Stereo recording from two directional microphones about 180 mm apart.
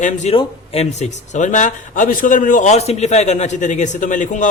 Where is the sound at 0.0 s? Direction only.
40° left (ahead or behind).